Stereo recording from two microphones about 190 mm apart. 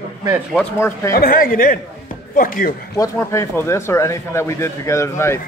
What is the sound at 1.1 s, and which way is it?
Speech, 50° left (ahead or behind).